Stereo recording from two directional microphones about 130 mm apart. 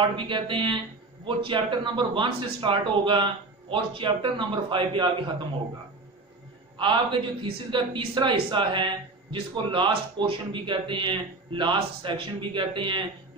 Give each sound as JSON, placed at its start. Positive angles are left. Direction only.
{"t": 0.1, "sound": "speech", "side_deg": -40}
{"t": 6.8, "sound": "speech", "side_deg": -40}